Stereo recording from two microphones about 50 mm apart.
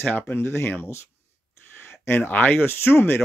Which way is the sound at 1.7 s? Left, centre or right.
Left.